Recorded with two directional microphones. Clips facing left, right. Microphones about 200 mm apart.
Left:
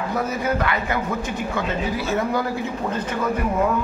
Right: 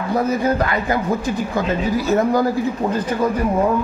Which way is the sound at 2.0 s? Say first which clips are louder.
Right 7 dB; 40° right (ahead or behind).